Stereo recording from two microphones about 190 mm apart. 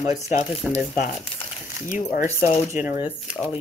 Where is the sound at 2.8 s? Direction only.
10° right (ahead or behind).